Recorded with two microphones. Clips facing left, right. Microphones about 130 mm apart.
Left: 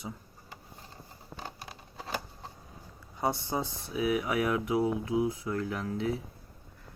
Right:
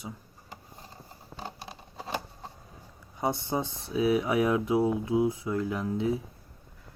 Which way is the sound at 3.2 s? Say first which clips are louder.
Right 2 dB; 20° right (ahead or behind).